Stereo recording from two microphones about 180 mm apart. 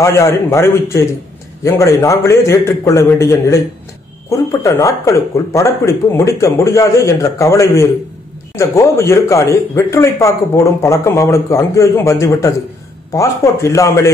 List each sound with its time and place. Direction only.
0.0 s speech: 15° left (ahead or behind)